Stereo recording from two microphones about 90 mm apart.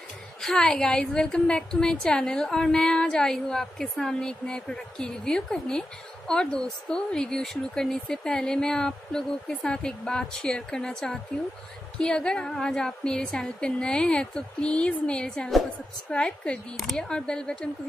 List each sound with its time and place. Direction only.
0.4 s a woman's voice: 5° left (ahead or behind)